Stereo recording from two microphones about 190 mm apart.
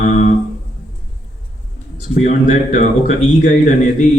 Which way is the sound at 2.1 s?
40° left (ahead or behind).